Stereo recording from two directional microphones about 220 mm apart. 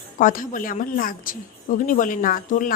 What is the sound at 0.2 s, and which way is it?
A woman's voice, 35° left (ahead or behind).